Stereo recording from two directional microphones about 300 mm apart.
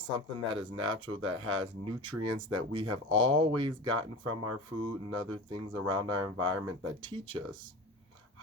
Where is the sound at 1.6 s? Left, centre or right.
Centre.